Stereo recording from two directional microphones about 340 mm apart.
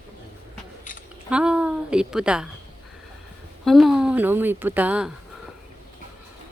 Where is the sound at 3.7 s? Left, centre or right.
Centre.